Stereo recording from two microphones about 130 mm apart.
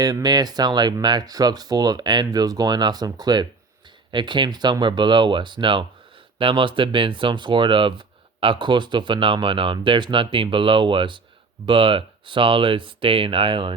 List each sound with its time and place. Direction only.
0.0 s speech: 30° right (ahead or behind)